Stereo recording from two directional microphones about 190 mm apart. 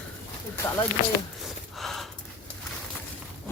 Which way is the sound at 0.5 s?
15° left (ahead or behind).